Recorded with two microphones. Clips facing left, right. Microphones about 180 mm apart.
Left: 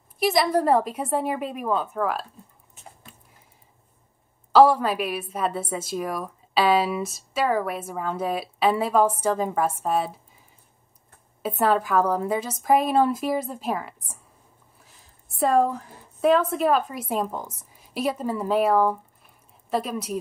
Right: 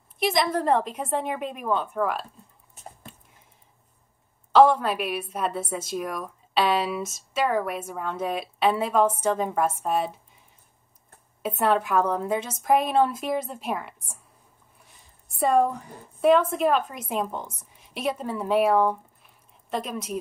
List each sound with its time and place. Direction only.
0.2 s a woman's voice: 5° left (ahead or behind)
2.7 s a sound: 45° right (ahead or behind)
4.5 s a woman's voice: 5° left (ahead or behind)
11.4 s a woman's voice: centre (ahead or behind)
15.3 s a woman's voice: centre (ahead or behind)